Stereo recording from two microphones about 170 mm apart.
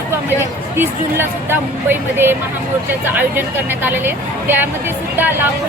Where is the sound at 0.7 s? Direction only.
10° right (ahead or behind).